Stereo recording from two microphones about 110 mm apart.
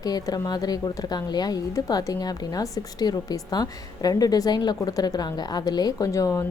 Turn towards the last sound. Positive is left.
turn(degrees=30)  # may be behind; listen again after turning